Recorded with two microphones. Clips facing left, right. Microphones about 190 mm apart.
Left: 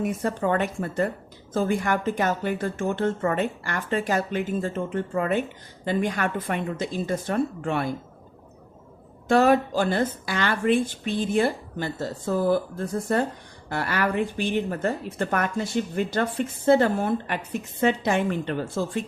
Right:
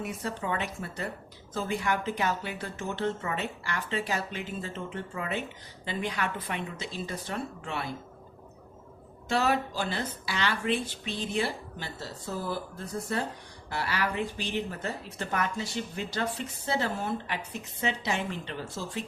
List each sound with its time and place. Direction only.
0.0 s speech: 50° left (ahead or behind)
9.3 s speech: 50° left (ahead or behind)